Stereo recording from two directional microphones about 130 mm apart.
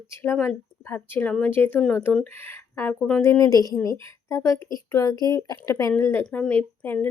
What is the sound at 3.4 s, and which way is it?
Speech, 30° left (ahead or behind).